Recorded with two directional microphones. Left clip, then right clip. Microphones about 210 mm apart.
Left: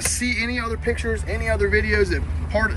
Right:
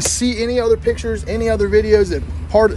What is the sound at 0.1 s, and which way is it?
Speech, 20° right (ahead or behind).